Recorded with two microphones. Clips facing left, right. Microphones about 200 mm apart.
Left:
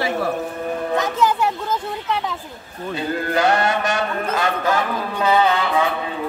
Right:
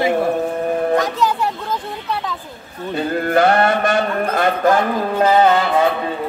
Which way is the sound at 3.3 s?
55° right (ahead or behind).